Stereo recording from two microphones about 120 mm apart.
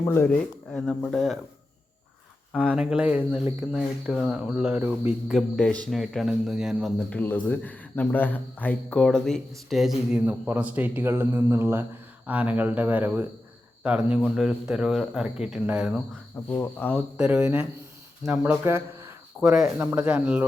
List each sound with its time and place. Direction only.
0.0 s speech: 20° left (ahead or behind)
0.3 s speech: 5° left (ahead or behind)
2.5 s speech: 5° right (ahead or behind)
5.3 s speech: 5° left (ahead or behind)
7.1 s speech: 15° left (ahead or behind); by 16.0 s 10° right (ahead or behind)
16.3 s speech: 20° left (ahead or behind)
17.2 s speech: 10° right (ahead or behind)
19.5 s speech: centre (ahead or behind)
19.8 s speech: 15° right (ahead or behind)